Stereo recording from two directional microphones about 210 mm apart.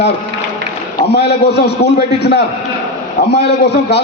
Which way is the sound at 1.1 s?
50° left (ahead or behind).